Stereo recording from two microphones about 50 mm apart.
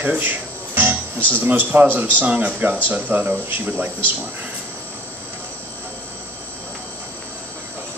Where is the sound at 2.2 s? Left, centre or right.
Right.